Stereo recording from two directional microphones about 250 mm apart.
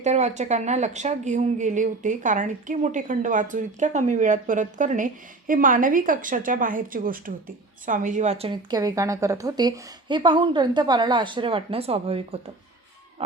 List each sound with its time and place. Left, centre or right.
0.0 s speech: right